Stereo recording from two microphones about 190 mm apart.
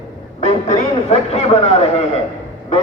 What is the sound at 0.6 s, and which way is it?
Speech, 35° left (ahead or behind).